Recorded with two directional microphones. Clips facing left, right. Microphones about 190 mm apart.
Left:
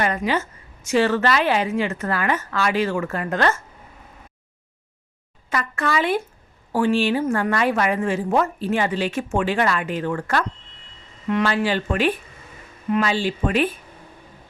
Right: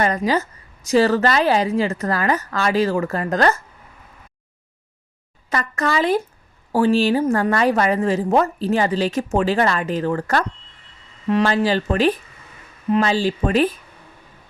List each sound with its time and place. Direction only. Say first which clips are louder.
0.0 s a woman's voice: right 3 dB; 40° right (ahead or behind)
5.5 s a woman's voice: right 2 dB; 40° right (ahead or behind)